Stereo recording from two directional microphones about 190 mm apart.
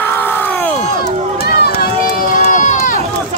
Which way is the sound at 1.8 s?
45° left (ahead or behind).